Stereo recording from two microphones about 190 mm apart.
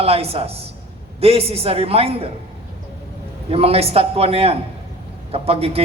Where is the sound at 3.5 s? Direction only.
30° right (ahead or behind).